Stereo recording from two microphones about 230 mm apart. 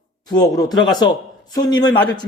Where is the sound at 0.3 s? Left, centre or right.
Centre.